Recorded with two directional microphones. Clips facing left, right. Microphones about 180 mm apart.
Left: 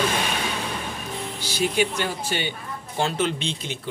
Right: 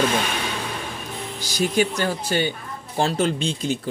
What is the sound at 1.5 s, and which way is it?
A man's voice, 40° right (ahead or behind).